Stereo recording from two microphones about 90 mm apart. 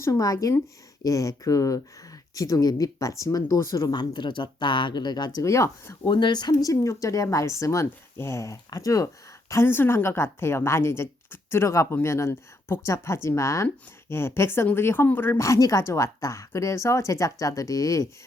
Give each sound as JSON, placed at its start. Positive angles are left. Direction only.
{"t": 0.0, "sound": "speech", "side_deg": 40}
{"t": 3.9, "sound": "speech", "side_deg": 60}
{"t": 5.4, "sound": "speech", "side_deg": 35}
{"t": 6.1, "sound": "speech", "side_deg": 60}
{"t": 9.5, "sound": "a woman's voice", "side_deg": 30}
{"t": 15.4, "sound": "speech", "side_deg": 35}